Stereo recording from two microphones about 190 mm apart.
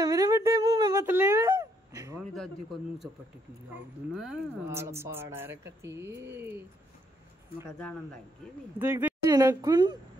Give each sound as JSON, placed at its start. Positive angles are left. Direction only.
{"t": 0.0, "sound": "a sound", "side_deg": -20}
{"t": 4.1, "sound": "speech", "side_deg": 0}
{"t": 4.6, "sound": "speech", "side_deg": -15}
{"t": 8.7, "sound": "speech", "side_deg": -10}